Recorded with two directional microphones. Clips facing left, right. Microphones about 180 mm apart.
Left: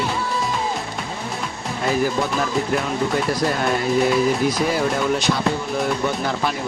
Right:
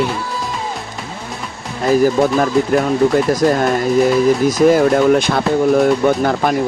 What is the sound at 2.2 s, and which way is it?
Speech, 50° right (ahead or behind).